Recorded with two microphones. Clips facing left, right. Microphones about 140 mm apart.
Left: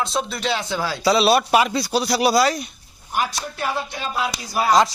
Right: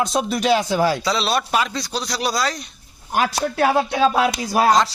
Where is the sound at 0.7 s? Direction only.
45° right (ahead or behind).